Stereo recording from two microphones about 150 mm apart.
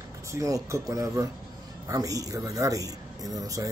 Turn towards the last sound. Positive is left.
turn(degrees=-25)  # may be behind; listen again after turning